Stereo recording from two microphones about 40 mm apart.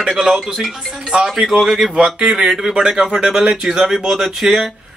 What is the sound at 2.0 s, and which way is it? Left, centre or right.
A man's voice, centre.